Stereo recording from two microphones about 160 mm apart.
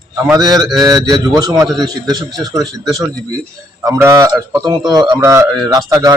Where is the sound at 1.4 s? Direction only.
20° right (ahead or behind).